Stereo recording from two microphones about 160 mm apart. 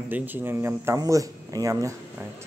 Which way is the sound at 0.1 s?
10° right (ahead or behind).